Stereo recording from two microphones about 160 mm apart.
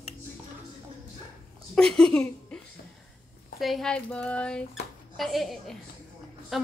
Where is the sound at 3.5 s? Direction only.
Centre (ahead or behind).